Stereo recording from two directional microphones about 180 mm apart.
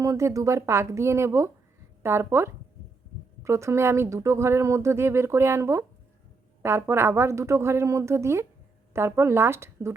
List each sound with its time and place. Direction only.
0.0 s speech: 15° right (ahead or behind)